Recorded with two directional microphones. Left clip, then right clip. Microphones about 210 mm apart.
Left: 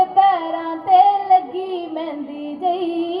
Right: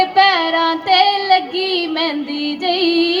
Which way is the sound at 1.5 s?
45° left (ahead or behind).